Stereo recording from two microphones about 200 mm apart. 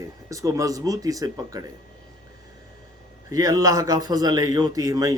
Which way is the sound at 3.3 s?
15° right (ahead or behind).